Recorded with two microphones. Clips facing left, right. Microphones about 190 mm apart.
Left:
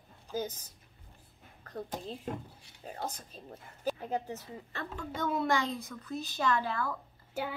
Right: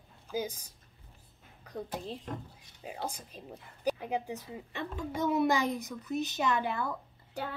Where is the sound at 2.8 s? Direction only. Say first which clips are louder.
Right 1 dB; 10° right (ahead or behind).